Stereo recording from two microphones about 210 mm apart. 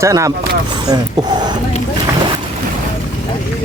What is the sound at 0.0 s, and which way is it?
Speech, 15° right (ahead or behind).